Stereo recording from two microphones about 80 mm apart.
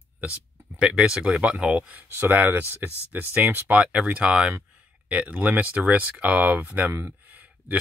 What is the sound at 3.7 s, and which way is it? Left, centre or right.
Speech, centre.